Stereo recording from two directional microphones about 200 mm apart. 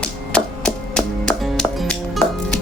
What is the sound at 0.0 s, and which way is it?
Music, 5° left (ahead or behind).